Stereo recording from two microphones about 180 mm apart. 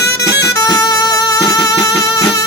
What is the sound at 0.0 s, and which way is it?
Music, 65° left (ahead or behind).